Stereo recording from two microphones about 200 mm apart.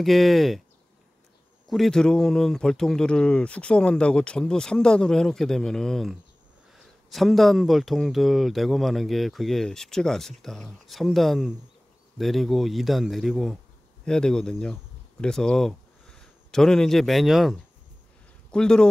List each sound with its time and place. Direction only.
0.0 s speech: centre (ahead or behind)
1.7 s speech: centre (ahead or behind)